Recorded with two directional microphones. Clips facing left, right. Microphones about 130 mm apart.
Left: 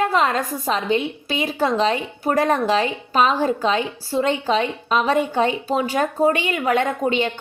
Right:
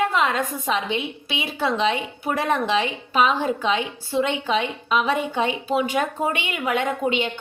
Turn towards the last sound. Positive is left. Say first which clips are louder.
# left 3 dB
turn(degrees=40)  # may be behind; listen again after turning